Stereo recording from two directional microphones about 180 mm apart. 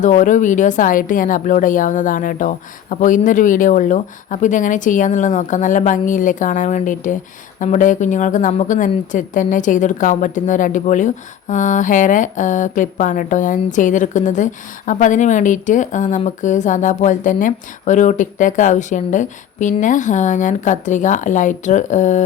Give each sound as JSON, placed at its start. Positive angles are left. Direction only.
{"t": 0.0, "sound": "a woman's voice", "side_deg": 45}